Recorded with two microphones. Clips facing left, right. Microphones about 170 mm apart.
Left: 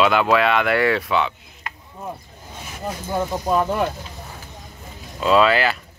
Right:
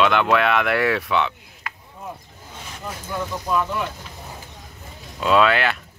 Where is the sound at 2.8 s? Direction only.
40° left (ahead or behind).